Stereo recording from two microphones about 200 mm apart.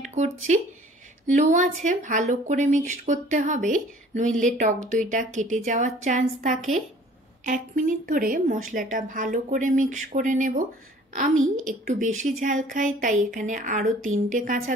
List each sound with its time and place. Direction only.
0.0 s speech: 40° right (ahead or behind)